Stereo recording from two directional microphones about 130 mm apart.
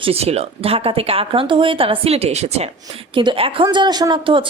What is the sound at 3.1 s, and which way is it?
A woman's voice, 40° right (ahead or behind).